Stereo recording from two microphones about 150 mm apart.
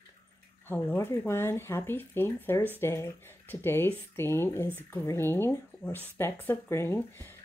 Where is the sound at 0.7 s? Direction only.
15° left (ahead or behind).